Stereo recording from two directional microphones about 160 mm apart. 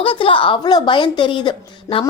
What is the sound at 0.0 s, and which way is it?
A woman's voice, 35° left (ahead or behind).